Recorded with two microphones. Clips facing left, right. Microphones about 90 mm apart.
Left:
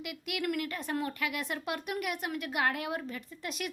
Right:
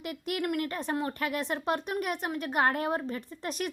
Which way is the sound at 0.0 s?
40° right (ahead or behind).